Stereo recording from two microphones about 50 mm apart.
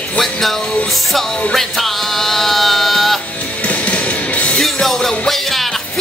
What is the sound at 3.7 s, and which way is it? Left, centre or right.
Music, left.